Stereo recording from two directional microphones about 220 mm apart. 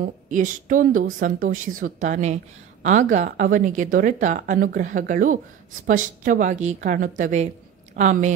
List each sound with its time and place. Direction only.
0.0 s a woman's voice: 35° right (ahead or behind)